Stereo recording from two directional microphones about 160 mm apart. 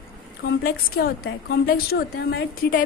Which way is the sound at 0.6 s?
70° left (ahead or behind).